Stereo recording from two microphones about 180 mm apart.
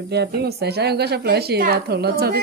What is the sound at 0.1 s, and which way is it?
A woman's voice, 65° right (ahead or behind).